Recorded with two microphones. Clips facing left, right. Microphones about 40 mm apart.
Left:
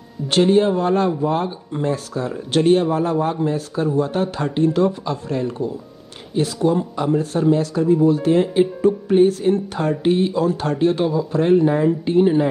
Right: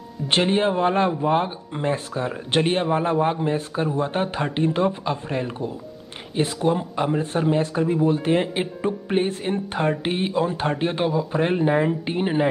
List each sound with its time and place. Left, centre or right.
0.3 s speech: right